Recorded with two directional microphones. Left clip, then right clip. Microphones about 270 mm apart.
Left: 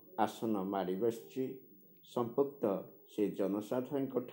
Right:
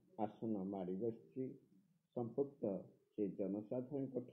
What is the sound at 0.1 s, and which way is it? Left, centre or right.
Speech, left.